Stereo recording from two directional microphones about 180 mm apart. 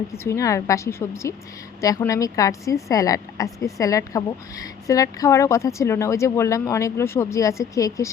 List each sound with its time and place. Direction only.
0.1 s a woman's voice: 15° left (ahead or behind)